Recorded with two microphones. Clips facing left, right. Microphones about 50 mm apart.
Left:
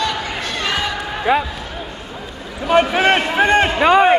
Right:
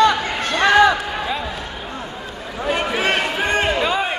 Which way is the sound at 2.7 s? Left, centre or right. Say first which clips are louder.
Left 8 dB; left.